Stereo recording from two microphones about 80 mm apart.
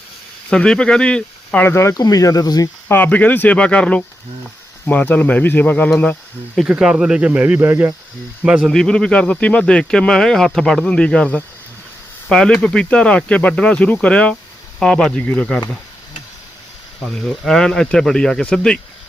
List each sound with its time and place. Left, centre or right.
0.5 s speech: centre
1.6 s speech: left
2.0 s speech: left
2.9 s speech: left
6.7 s speech: centre; by 7.9 s right
8.6 s speech: centre
17.0 s speech: centre